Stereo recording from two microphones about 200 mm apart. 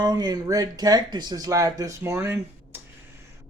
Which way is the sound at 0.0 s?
20° right (ahead or behind).